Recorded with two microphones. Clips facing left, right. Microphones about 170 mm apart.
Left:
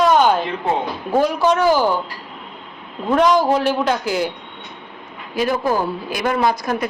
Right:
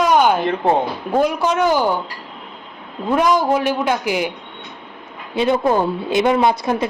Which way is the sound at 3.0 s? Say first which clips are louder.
Left 1 dB; 10° right (ahead or behind).